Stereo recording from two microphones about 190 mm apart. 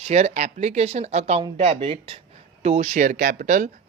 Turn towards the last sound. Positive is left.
turn(degrees=-40)  # may be behind; listen again after turning